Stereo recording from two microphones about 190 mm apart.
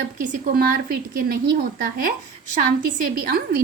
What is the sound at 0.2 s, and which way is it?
A woman's voice, 45° right (ahead or behind).